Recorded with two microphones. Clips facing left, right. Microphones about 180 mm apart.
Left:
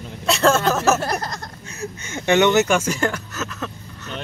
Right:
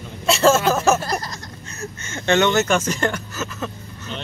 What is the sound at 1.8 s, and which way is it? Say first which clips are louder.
Speech: left 1 dB; 15° left (ahead or behind).